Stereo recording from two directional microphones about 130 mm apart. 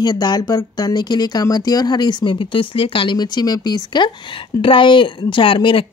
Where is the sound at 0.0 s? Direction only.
30° left (ahead or behind).